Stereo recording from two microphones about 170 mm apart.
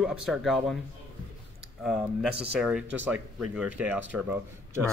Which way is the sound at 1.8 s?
Centre (ahead or behind).